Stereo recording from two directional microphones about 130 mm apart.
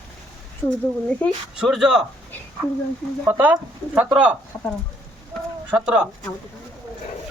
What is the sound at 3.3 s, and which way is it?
Speech, 15° right (ahead or behind).